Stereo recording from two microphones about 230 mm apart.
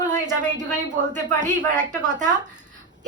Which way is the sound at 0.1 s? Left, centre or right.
Right.